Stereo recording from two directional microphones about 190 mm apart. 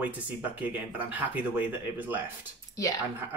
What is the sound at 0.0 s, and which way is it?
Speech, 10° right (ahead or behind).